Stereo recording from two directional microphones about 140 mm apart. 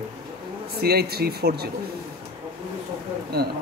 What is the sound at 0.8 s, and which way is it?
Speech, 90° right.